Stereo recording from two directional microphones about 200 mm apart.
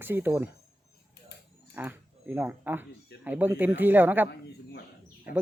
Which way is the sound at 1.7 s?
10° right (ahead or behind).